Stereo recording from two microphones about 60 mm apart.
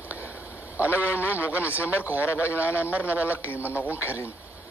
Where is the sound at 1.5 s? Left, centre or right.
Right.